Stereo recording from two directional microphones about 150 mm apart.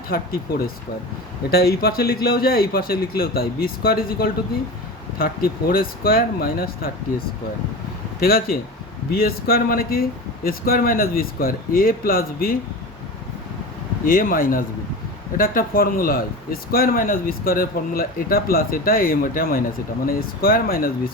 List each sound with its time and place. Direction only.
1.5 s a man's voice: 90° left
8.2 s a man's voice: 85° left
14.0 s speech: 70° left (ahead or behind)